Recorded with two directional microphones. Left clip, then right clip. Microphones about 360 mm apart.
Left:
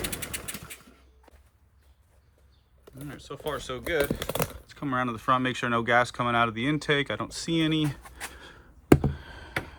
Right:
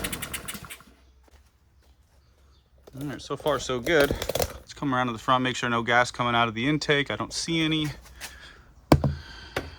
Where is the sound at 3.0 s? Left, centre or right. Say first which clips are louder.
Right 7 dB; centre.